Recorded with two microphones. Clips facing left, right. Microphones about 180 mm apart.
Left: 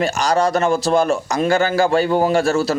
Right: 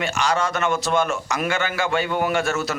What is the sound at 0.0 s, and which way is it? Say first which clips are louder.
A man's voice: left 5 dB; 35° left (ahead or behind).